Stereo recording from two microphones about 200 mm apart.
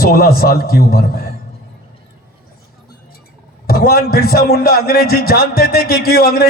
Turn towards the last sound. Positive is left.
turn(degrees=50)  # may be behind; listen again after turning